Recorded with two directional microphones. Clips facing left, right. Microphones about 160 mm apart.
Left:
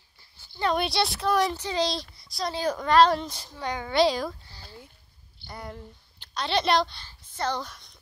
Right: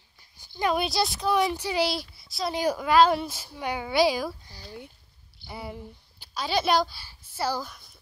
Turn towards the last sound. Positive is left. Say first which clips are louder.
# even
turn(degrees=-5)  # may be behind; listen again after turning